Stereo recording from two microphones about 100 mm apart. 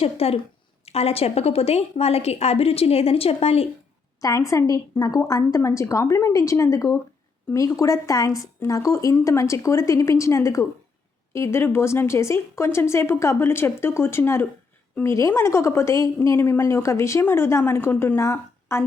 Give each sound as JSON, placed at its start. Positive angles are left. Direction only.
{"t": 0.0, "sound": "a woman's voice", "side_deg": 90}
{"t": 4.2, "sound": "speech", "side_deg": 35}